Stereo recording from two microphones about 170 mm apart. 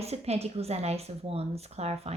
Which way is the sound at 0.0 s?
40° right (ahead or behind).